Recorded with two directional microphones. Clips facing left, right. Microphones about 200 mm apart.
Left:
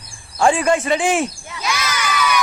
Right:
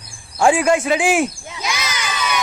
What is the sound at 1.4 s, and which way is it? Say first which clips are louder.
Crowd: left 1 dB; 20° right (ahead or behind).